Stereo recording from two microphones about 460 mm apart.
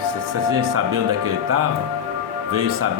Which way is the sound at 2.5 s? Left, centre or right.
Right.